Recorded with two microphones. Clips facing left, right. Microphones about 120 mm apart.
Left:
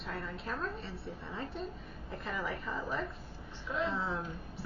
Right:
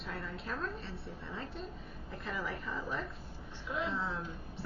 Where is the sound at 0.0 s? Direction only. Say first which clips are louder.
Left 2 dB; centre (ahead or behind).